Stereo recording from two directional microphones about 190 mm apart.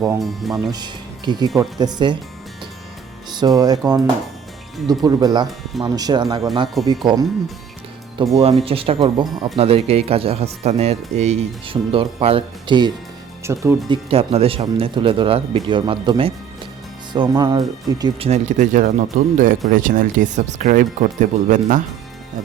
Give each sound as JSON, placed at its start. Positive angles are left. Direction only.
{"t": 0.2, "sound": "speech", "side_deg": 0}
{"t": 0.7, "sound": "speech", "side_deg": -20}
{"t": 3.3, "sound": "speech", "side_deg": -20}
{"t": 13.4, "sound": "speech", "side_deg": -15}
{"t": 18.3, "sound": "speech", "side_deg": -40}